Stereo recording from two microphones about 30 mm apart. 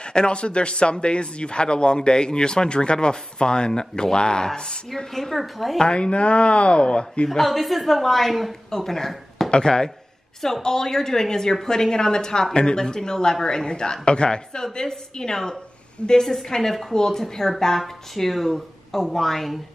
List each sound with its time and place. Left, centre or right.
0.0 s a woman's voice: left
5.1 s a woman's voice: centre
5.8 s speech: left
7.2 s a woman's voice: centre
8.6 s speech: centre
9.5 s a woman's voice: left
16.2 s a woman's voice: centre
17.7 s a woman's voice: centre